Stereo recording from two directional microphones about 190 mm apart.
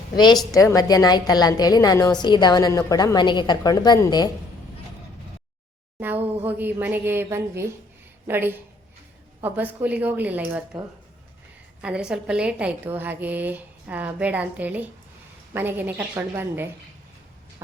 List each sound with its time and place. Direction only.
0.5 s a woman's voice: 20° left (ahead or behind)
6.0 s a sound: 10° right (ahead or behind)
6.4 s a woman's voice: 10° right (ahead or behind)
11.8 s a woman's voice: 5° right (ahead or behind)